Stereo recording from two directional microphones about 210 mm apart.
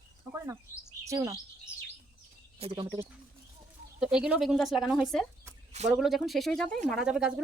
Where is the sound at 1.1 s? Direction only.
15° right (ahead or behind).